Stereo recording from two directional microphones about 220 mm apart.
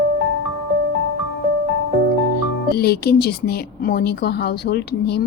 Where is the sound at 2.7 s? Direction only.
45° left (ahead or behind).